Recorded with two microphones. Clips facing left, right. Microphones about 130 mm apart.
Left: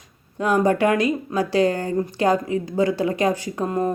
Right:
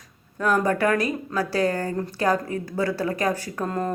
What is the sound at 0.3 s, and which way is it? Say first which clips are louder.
A woman's voice: left 3 dB; 20° left (ahead or behind).